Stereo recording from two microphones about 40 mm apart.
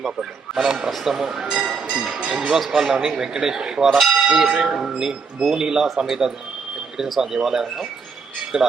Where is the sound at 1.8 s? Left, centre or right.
Right.